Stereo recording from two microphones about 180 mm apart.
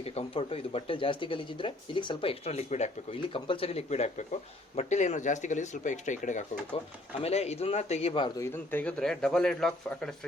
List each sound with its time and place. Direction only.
0.0 s speech: 35° left (ahead or behind)
8.4 s a man's voice: 10° left (ahead or behind)